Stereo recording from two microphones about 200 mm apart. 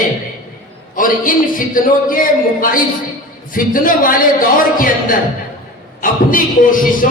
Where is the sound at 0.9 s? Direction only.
45° left (ahead or behind).